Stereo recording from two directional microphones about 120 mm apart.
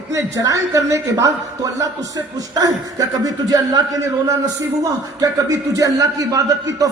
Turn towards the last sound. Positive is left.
turn(degrees=-30)  # may be behind; listen again after turning